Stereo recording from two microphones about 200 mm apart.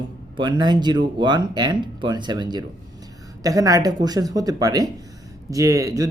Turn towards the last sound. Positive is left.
turn(degrees=-15)  # may be behind; listen again after turning